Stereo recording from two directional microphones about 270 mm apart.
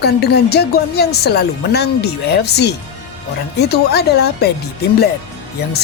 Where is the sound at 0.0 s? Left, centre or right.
Left.